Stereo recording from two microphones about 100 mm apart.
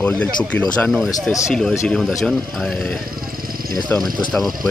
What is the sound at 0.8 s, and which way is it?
Speech, centre (ahead or behind).